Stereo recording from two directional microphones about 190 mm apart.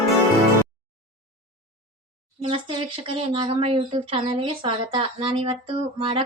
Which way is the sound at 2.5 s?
30° right (ahead or behind).